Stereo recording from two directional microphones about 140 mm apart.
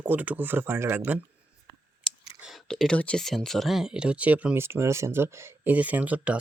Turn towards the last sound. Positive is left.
turn(degrees=-10)  # may be behind; listen again after turning